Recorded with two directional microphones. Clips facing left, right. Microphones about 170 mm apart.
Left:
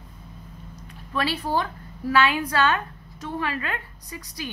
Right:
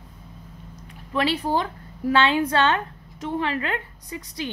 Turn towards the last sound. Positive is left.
turn(degrees=-25)  # may be behind; listen again after turning